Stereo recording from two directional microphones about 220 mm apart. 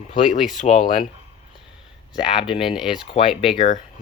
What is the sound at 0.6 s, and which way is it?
Speech, 35° left (ahead or behind).